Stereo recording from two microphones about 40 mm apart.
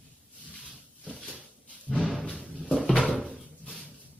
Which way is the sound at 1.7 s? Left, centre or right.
Left.